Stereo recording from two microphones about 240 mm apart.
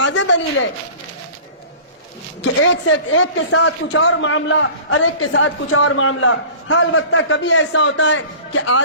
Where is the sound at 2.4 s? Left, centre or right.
Left.